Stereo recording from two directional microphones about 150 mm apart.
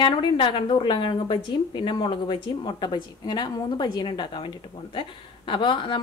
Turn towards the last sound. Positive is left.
turn(degrees=35)  # may be behind; listen again after turning